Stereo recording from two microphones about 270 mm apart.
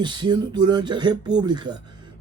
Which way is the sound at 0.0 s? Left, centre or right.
Centre.